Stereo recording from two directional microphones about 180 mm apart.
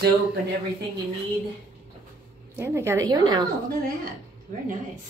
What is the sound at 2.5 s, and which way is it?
Speech, 15° right (ahead or behind).